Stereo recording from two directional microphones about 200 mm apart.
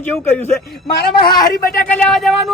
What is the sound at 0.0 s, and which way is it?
Speech, 10° left (ahead or behind).